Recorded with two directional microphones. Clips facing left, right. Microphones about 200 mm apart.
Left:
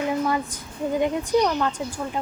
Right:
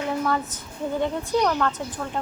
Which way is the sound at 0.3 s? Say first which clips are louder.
Even; 15° left (ahead or behind).